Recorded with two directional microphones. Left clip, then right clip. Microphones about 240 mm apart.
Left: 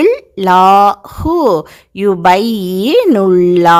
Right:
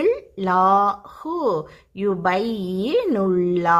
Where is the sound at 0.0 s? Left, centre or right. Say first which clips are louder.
Left 10 dB; left.